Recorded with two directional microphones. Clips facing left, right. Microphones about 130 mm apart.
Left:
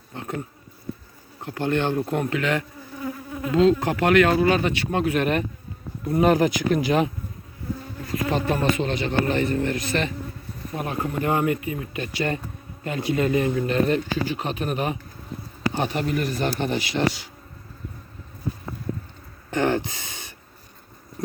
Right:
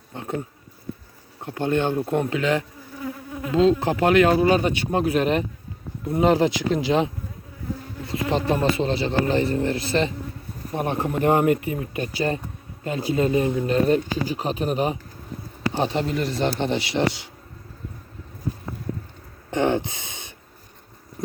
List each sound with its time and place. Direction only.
0.1 s bee: 20° right (ahead or behind)
1.4 s a man's voice: 20° right (ahead or behind)
6.1 s a man's voice: 20° right (ahead or behind)
19.5 s speech: 20° right (ahead or behind)